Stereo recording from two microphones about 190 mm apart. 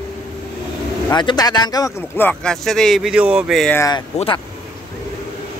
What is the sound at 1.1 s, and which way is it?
Speech, 20° left (ahead or behind).